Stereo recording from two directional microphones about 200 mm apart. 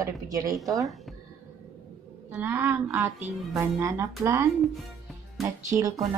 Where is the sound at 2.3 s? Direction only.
10° right (ahead or behind).